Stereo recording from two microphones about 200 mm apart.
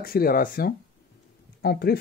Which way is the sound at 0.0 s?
50° left (ahead or behind).